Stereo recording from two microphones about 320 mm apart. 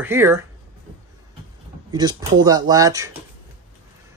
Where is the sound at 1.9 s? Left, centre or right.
Centre.